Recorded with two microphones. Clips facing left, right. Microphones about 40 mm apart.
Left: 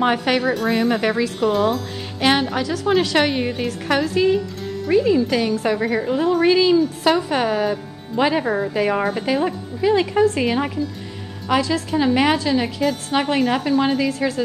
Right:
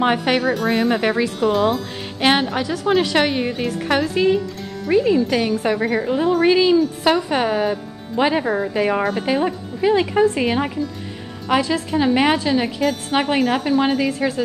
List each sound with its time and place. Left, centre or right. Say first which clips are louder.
0.0 s a woman's voice: right 1 dB; centre
1.4 s a woman's voice: right 1 dB; centre